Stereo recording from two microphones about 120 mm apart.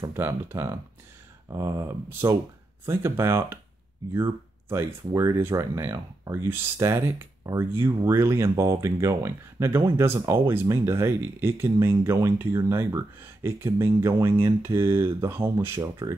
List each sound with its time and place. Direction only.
0.0 s speech: 20° right (ahead or behind)